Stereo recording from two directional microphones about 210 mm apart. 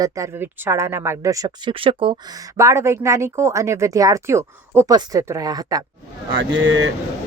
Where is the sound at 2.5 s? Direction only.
15° right (ahead or behind).